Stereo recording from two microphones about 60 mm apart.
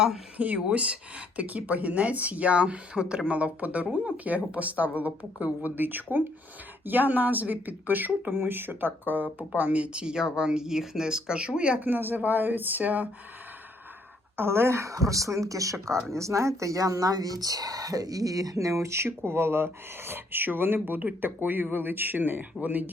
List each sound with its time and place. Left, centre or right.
0.3 s speech: right
11.8 s speech: right
14.3 s speech: right